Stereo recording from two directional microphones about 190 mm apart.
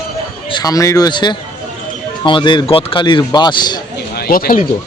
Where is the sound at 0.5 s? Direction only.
20° left (ahead or behind).